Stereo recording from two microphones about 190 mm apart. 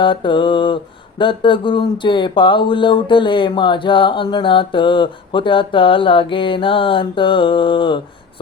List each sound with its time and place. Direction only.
0.0 s speech: 25° left (ahead or behind)